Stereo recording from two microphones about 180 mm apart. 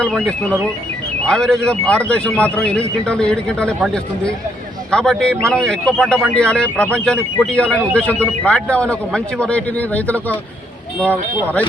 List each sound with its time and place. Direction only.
0.0 s speech: 5° left (ahead or behind)